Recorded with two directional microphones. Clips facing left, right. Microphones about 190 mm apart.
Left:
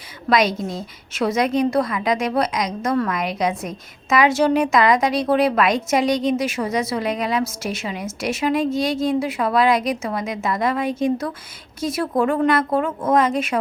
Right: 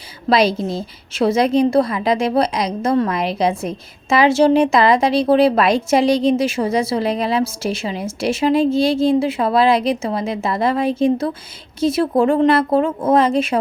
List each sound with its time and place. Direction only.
0.3 s a woman's voice: 30° right (ahead or behind)